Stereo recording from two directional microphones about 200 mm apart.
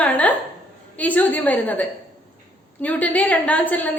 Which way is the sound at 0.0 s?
5° left (ahead or behind).